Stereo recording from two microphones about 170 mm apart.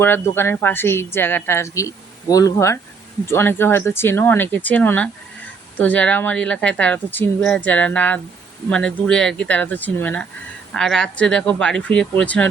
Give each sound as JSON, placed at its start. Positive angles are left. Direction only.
{"t": 0.0, "sound": "speech", "side_deg": 15}